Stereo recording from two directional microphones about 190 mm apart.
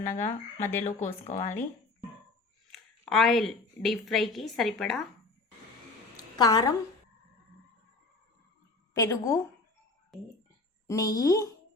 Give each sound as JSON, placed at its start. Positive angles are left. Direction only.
{"t": 0.0, "sound": "speech", "side_deg": 35}
{"t": 2.7, "sound": "a woman's voice", "side_deg": 0}
{"t": 6.3, "sound": "a woman's voice", "side_deg": 20}
{"t": 9.0, "sound": "a woman's voice", "side_deg": 15}
{"t": 10.8, "sound": "a woman's voice", "side_deg": 15}